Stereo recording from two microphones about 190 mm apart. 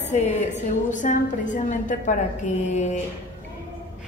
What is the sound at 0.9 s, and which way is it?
A woman's voice, 40° left (ahead or behind).